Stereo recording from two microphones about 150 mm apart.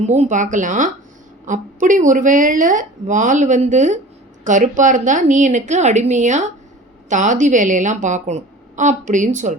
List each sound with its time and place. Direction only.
0.0 s speech: 50° right (ahead or behind)